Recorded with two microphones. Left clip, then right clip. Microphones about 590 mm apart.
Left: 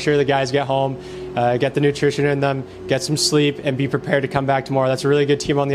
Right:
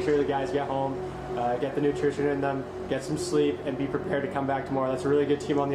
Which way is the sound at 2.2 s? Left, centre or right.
Left.